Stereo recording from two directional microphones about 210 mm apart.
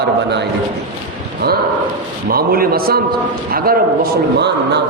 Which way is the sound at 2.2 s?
45° right (ahead or behind).